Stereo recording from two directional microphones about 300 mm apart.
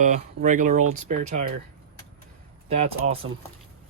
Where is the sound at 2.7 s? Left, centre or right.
Right.